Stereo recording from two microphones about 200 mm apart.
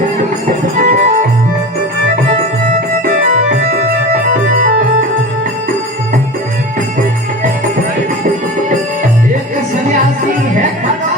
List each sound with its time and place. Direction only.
0.8 s music: 45° right (ahead or behind)
3.6 s organ: 50° right (ahead or behind)